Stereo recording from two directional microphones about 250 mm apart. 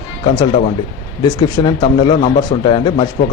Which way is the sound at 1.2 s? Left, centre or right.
Centre.